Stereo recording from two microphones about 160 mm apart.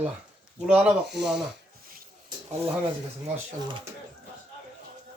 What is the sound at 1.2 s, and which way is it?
Speech, 5° right (ahead or behind).